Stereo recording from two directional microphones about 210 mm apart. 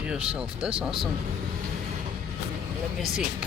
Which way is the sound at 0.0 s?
5° right (ahead or behind).